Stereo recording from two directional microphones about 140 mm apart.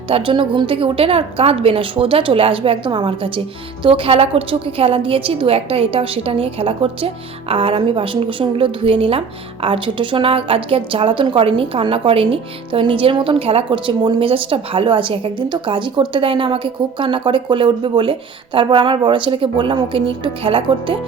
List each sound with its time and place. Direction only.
0.1 s a woman's voice: 35° right (ahead or behind)